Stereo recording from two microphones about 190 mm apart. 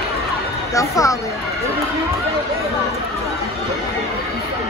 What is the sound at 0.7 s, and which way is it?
Speech, 15° left (ahead or behind).